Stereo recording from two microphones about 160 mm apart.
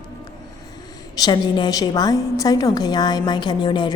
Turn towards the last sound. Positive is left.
turn(degrees=30)  # may be behind; listen again after turning